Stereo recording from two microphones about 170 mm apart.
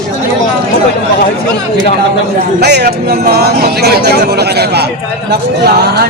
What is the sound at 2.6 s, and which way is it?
Speech, 70° right (ahead or behind).